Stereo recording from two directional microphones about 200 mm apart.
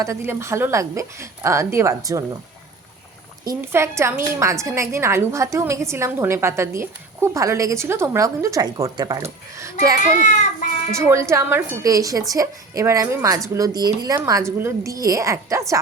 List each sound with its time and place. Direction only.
0.0 s a woman's voice: 15° right (ahead or behind)
3.4 s a woman's voice: 15° right (ahead or behind)
10.9 s a woman's voice: 15° right (ahead or behind)